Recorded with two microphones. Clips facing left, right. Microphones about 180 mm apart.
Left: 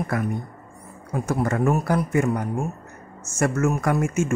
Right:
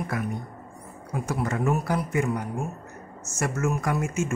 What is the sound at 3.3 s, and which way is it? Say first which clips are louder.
Speech: left 5 dB; 50° left (ahead or behind).